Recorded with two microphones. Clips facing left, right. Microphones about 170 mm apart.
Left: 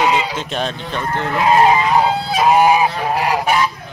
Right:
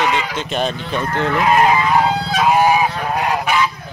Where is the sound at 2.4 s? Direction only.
20° left (ahead or behind).